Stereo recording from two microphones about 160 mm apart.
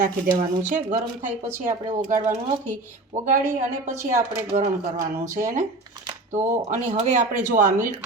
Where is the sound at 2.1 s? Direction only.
50° right (ahead or behind).